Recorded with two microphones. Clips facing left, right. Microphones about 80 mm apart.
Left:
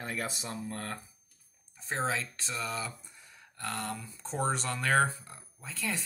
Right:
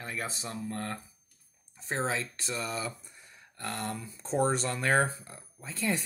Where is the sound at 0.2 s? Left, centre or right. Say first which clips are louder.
Even; right.